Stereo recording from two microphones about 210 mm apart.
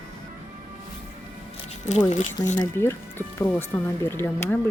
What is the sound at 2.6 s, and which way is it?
Speech, 15° left (ahead or behind).